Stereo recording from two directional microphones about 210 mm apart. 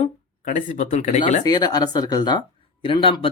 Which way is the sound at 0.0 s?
35° left (ahead or behind).